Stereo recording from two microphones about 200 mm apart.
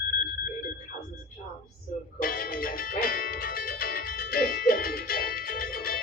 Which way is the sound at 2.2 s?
45° left (ahead or behind).